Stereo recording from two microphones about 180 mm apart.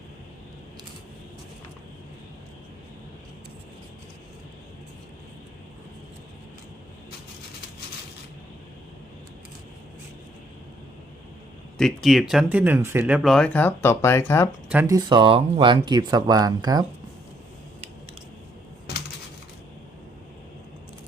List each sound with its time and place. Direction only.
11.8 s speech: centre (ahead or behind)
14.7 s speech: 15° right (ahead or behind)